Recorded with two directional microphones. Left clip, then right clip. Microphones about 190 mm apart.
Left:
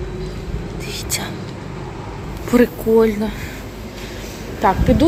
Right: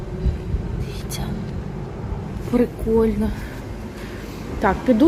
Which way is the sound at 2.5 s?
5° left (ahead or behind).